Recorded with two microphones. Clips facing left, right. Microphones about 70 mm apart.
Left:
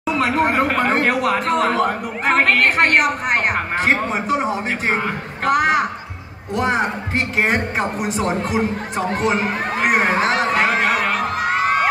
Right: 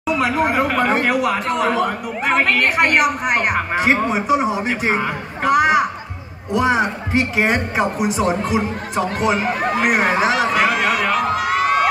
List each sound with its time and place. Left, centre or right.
0.0 s a woman's voice: centre
9.1 s speech: left
9.4 s a woman's voice: centre
10.5 s crowd: left